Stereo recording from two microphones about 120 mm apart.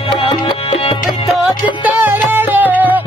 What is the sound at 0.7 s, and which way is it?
Music, 55° left (ahead or behind).